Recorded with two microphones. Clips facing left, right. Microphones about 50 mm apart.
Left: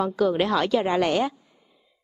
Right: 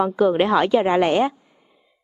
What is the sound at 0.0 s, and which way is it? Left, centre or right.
Speech, right.